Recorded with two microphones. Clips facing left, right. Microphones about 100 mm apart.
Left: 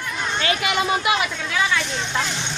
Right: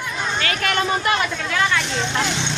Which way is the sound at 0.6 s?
10° left (ahead or behind).